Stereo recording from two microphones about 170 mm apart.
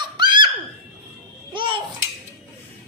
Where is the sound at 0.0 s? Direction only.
25° right (ahead or behind).